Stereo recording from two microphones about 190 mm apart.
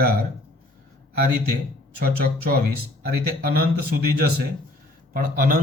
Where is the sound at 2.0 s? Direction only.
50° right (ahead or behind).